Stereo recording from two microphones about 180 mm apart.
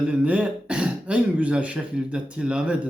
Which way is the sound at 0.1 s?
5° right (ahead or behind).